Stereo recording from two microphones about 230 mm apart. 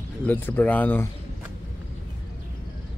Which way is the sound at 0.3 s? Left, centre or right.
Centre.